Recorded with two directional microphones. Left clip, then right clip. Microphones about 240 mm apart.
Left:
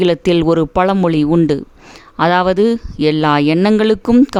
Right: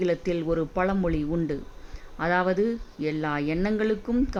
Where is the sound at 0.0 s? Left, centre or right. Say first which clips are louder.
Left 13 dB; left.